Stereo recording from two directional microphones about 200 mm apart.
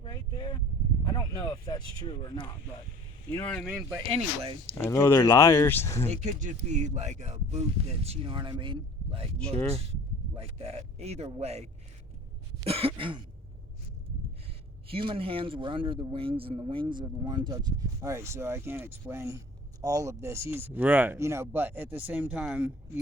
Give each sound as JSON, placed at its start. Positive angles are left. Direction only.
{"t": 0.0, "sound": "a sound", "side_deg": 25}
{"t": 1.0, "sound": "speech", "side_deg": 20}
{"t": 3.2, "sound": "speech", "side_deg": 10}
{"t": 3.7, "sound": "speech", "side_deg": -10}
{"t": 4.8, "sound": "speech", "side_deg": 10}
{"t": 6.1, "sound": "speech", "side_deg": -35}
{"t": 12.5, "sound": "throat clearing", "side_deg": -30}
{"t": 14.8, "sound": "a man's voice", "side_deg": -25}